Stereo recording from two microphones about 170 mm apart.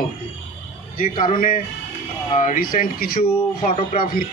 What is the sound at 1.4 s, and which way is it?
Speech, 50° left (ahead or behind).